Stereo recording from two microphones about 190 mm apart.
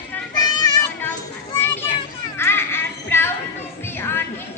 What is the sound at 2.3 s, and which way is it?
Music, 10° left (ahead or behind).